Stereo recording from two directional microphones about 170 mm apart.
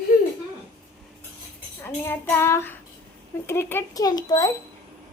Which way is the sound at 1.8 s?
10° left (ahead or behind).